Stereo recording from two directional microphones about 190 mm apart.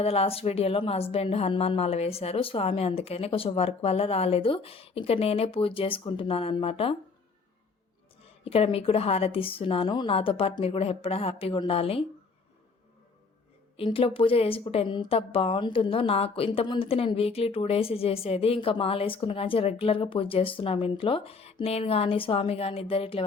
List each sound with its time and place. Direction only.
0.0 s a woman's voice: 30° left (ahead or behind)
8.4 s a woman's voice: 30° left (ahead or behind)
13.7 s a woman's voice: 30° left (ahead or behind)